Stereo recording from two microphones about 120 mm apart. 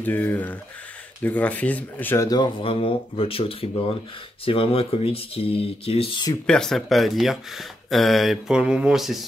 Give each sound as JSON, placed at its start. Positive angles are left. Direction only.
{"t": 0.0, "sound": "speech", "side_deg": 15}
{"t": 2.1, "sound": "speech", "side_deg": 35}
{"t": 2.6, "sound": "speech", "side_deg": 50}
{"t": 6.4, "sound": "speech", "side_deg": 5}